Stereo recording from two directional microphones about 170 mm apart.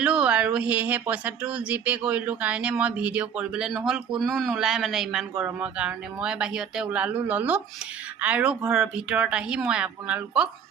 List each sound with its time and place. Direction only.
0.0 s speech: 5° right (ahead or behind)